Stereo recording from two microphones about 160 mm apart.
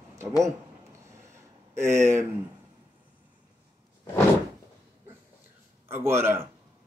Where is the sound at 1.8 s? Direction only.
15° right (ahead or behind).